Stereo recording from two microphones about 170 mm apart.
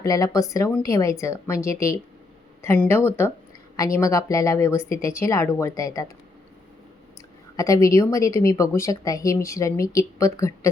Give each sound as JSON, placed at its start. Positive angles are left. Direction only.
{"t": 0.0, "sound": "a woman's voice", "side_deg": 20}
{"t": 7.5, "sound": "a woman's voice", "side_deg": 20}